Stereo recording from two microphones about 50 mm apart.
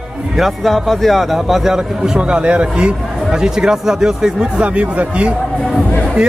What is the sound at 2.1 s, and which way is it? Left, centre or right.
Speech, right.